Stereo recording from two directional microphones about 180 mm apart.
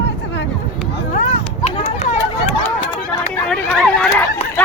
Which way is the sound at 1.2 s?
40° left (ahead or behind).